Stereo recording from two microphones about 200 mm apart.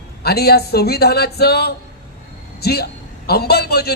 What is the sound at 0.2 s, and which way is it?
A man's voice, 50° left (ahead or behind).